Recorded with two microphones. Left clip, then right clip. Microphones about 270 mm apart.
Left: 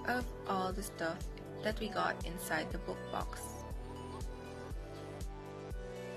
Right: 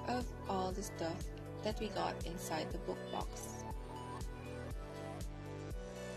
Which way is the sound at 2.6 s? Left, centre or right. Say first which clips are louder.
Left 1 dB; centre.